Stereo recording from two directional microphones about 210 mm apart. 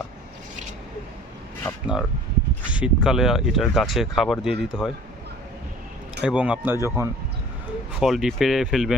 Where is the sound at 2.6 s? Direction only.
5° right (ahead or behind).